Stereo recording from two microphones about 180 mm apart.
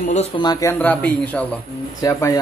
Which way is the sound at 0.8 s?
10° left (ahead or behind).